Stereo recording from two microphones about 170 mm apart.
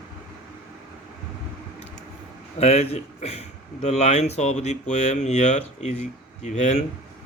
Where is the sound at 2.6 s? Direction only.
40° left (ahead or behind).